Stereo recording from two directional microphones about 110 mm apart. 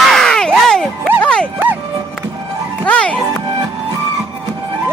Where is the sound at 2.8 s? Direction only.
10° left (ahead or behind).